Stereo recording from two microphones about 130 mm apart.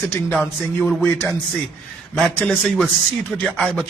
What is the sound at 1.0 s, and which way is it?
Speech, 20° left (ahead or behind).